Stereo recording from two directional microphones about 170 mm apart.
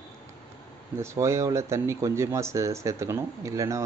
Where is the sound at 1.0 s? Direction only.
15° right (ahead or behind).